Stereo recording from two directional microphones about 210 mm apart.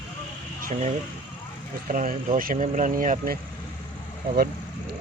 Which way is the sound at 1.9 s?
40° right (ahead or behind).